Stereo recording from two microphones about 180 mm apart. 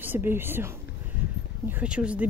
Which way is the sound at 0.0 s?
10° right (ahead or behind).